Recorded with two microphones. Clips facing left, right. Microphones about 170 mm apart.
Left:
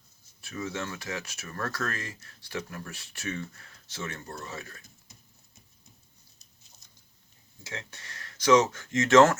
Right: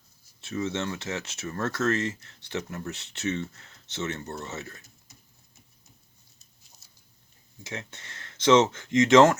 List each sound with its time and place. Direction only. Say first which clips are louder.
0.4 s speech: right 5 dB; 25° right (ahead or behind)
6.8 s a sound: left 1 dB; 5° right (ahead or behind)
7.6 s speech: right 3 dB; 20° right (ahead or behind)